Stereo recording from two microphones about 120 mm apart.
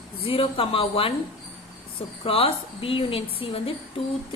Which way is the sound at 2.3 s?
50° left (ahead or behind).